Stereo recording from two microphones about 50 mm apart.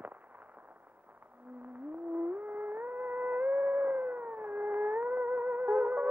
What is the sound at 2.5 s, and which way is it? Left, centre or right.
Music, right.